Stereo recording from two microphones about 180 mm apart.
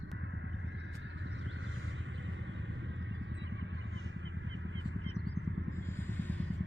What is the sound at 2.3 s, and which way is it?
Vehicle, 90° right.